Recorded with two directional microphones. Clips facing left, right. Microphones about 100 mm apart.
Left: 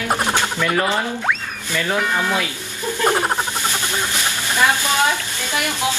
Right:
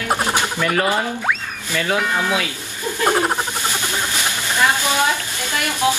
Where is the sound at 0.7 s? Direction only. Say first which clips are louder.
Right 1 dB; 15° right (ahead or behind).